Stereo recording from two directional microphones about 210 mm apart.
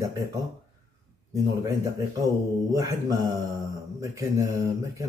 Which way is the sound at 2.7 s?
15° right (ahead or behind).